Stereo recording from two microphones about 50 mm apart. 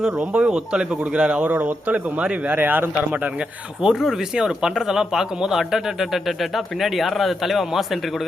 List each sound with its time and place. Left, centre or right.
0.0 s speech: centre
1.5 s speech: right
2.2 s speech: right
2.6 s speech: right
3.8 s speech: centre